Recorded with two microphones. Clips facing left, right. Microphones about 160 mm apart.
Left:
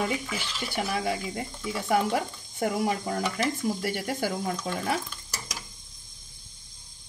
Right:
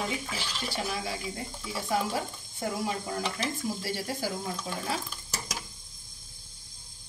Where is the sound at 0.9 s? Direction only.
60° left (ahead or behind).